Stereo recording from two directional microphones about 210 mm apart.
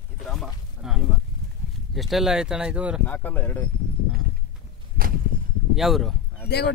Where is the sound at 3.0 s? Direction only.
10° left (ahead or behind).